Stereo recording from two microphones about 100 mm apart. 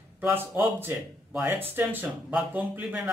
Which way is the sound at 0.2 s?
20° right (ahead or behind).